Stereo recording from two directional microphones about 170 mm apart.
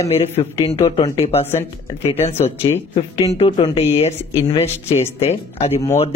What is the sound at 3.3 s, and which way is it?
Speech, 35° left (ahead or behind).